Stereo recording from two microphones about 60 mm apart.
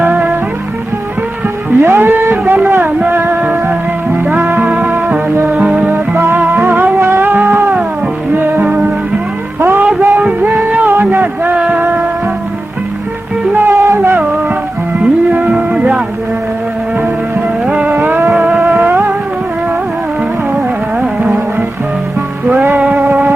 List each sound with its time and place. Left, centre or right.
1.8 s music: right
4.7 s music: right
6.6 s music: right
7.0 s music: right
7.3 s music: right
8.6 s music: right
9.6 s music: right
11.5 s music: centre
13.5 s music: right
13.7 s a sound: right
15.0 s music: centre
17.8 s music: right
18.8 s music: right
21.0 s music: centre